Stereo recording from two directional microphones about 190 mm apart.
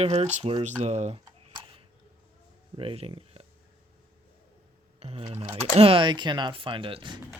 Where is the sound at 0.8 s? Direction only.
35° right (ahead or behind).